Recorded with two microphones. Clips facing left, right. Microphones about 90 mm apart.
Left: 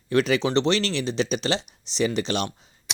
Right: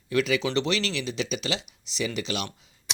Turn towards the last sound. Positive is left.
turn(degrees=0)  # may be behind; listen again after turning